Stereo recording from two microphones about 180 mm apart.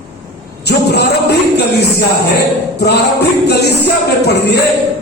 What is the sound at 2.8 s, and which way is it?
A man's voice, 65° left (ahead or behind).